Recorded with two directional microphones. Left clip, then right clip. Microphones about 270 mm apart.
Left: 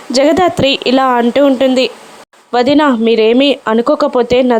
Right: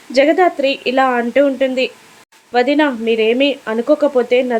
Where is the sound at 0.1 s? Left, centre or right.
Left.